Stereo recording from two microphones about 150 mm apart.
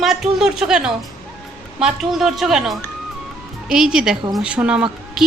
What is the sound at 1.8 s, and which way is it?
Speech, 5° right (ahead or behind).